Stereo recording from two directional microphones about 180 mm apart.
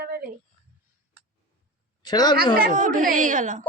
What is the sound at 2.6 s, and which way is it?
Speech, 50° right (ahead or behind).